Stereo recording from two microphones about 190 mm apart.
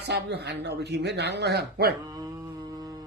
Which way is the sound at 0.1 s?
60° right (ahead or behind).